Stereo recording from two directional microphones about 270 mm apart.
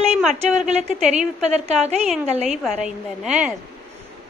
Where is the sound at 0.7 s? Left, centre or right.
Right.